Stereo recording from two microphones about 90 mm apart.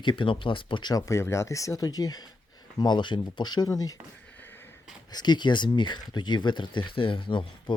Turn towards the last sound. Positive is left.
turn(degrees=70)  # may be behind; listen again after turning